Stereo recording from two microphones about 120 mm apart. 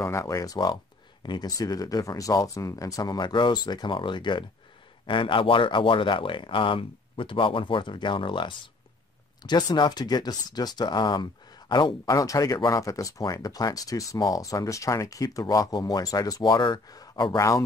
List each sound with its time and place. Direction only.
0.0 s speech: 25° left (ahead or behind); by 11.2 s 40° left (ahead or behind)
12.1 s speech: 30° left (ahead or behind)